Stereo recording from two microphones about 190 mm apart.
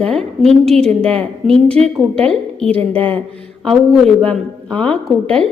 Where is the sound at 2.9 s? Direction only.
10° left (ahead or behind).